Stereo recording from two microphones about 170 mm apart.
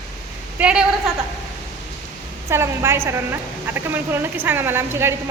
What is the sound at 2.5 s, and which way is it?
A woman's voice, 15° right (ahead or behind).